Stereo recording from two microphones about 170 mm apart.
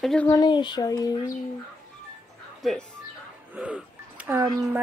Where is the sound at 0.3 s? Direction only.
25° left (ahead or behind).